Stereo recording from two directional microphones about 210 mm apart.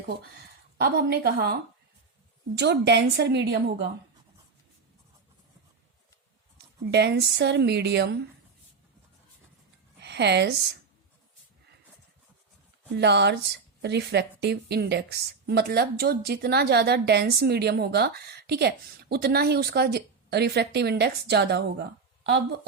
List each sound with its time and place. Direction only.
0.8 s a woman's voice: 50° right (ahead or behind)
2.6 s a woman's voice: 55° right (ahead or behind)
6.9 s a woman's voice: 55° right (ahead or behind)
10.0 s a woman's voice: 55° right (ahead or behind)
13.0 s a woman's voice: 55° right (ahead or behind)